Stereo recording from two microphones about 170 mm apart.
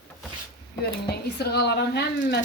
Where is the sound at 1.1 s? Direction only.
70° left (ahead or behind).